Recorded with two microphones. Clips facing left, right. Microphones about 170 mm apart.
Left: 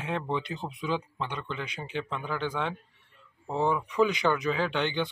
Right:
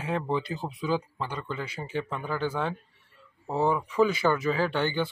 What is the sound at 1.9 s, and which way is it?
A man's voice, 10° right (ahead or behind).